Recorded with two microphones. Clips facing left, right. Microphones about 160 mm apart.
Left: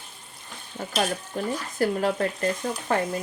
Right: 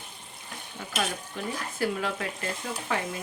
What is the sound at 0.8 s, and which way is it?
Speech, 45° left (ahead or behind).